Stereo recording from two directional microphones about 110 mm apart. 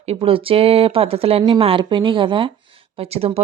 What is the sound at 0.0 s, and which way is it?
Speech, 65° right (ahead or behind).